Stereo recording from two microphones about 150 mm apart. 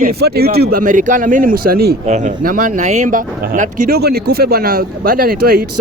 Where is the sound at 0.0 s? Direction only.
90° right.